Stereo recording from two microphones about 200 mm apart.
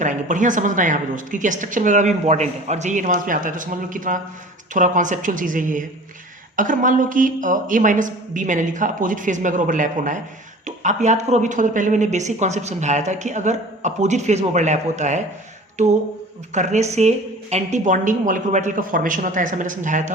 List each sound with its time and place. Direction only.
0.0 s speech: 40° right (ahead or behind)
16.5 s speech: 35° right (ahead or behind)